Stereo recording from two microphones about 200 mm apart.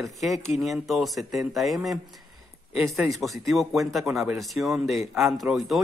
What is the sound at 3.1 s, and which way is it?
Speech, centre (ahead or behind).